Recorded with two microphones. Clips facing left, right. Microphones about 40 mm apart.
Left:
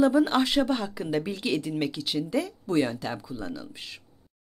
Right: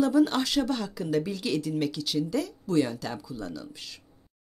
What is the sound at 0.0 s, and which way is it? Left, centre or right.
Speech, left.